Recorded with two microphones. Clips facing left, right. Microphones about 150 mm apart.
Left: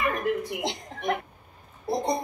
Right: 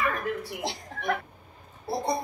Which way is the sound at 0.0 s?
20° left (ahead or behind).